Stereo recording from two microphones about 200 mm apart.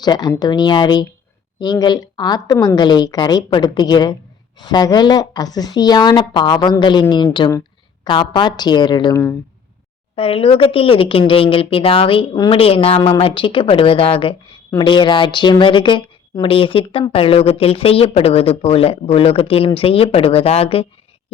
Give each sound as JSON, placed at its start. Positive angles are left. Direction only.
{"t": 0.0, "sound": "speech", "side_deg": 20}
{"t": 10.2, "sound": "speech", "side_deg": 30}